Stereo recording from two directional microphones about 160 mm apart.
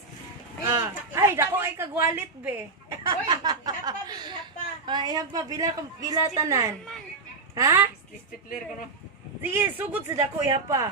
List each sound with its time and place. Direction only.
0.7 s a woman's voice: 20° right (ahead or behind)
3.0 s a woman's voice: 25° right (ahead or behind)
9.4 s a woman's voice: 15° right (ahead or behind)